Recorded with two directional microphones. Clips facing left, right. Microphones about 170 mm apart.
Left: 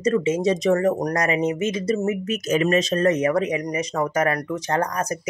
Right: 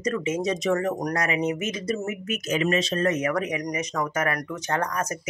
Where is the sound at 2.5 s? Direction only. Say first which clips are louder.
Left 4 dB; 45° left (ahead or behind).